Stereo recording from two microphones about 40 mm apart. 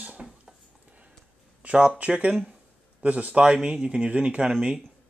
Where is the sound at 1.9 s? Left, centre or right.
Right.